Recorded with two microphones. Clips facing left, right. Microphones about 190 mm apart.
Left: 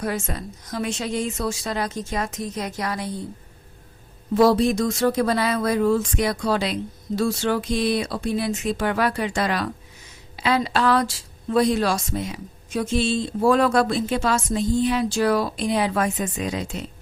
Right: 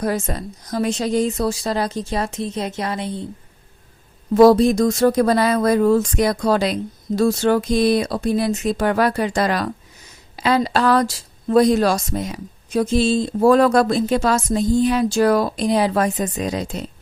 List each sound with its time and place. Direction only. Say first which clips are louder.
0.0 s speech: right 5 dB; 40° right (ahead or behind)
4.4 s speech: right 6 dB; 40° right (ahead or behind)